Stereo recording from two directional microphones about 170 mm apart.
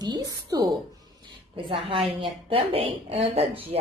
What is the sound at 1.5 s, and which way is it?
Speech, 30° right (ahead or behind).